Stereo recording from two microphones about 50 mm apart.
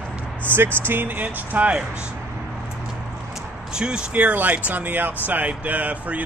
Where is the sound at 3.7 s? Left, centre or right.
Centre.